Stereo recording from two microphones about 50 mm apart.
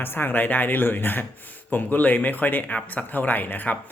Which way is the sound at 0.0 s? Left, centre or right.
Left.